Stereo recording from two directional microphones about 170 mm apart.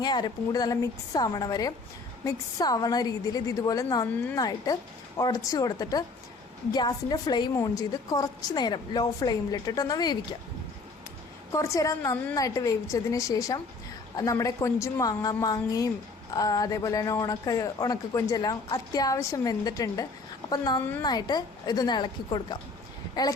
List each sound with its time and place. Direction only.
0.0 s speech: 25° left (ahead or behind)
11.5 s a woman's voice: 15° left (ahead or behind)